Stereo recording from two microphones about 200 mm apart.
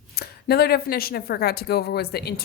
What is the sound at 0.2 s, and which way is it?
A woman's voice, 50° left (ahead or behind).